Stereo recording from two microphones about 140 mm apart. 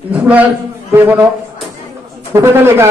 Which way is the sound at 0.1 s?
10° right (ahead or behind).